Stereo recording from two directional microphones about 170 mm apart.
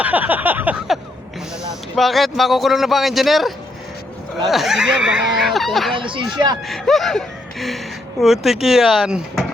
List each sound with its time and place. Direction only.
0.0 s a sound: 10° right (ahead or behind)
2.0 s a man's voice: centre (ahead or behind)
6.0 s speech: 30° right (ahead or behind)
6.7 s a man's voice: centre (ahead or behind)